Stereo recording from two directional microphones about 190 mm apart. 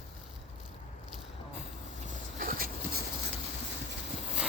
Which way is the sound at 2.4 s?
50° right (ahead or behind).